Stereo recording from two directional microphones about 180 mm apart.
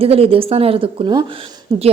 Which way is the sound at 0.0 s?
30° right (ahead or behind).